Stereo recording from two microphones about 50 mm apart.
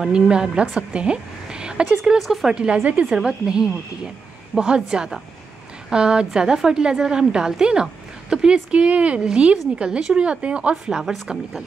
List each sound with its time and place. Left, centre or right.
0.1 s a woman's voice: centre
2.1 s speech: centre
2.5 s speech: right
3.1 s a woman's voice: centre
10.9 s a woman's voice: centre